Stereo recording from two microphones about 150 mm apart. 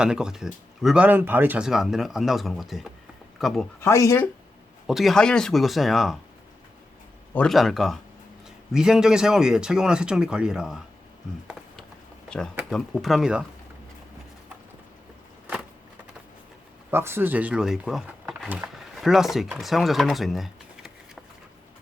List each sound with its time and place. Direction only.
0.0 s speech: 5° right (ahead or behind)
3.8 s speech: 20° left (ahead or behind)
4.9 s speech: centre (ahead or behind)
7.3 s speech: centre (ahead or behind)
12.7 s speech: 5° left (ahead or behind)
16.9 s speech: 15° right (ahead or behind)